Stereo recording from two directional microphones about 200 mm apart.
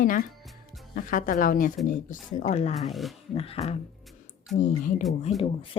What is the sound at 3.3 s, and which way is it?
Speech, 30° left (ahead or behind).